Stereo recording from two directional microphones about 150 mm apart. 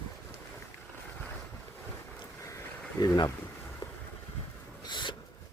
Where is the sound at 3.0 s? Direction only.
20° left (ahead or behind).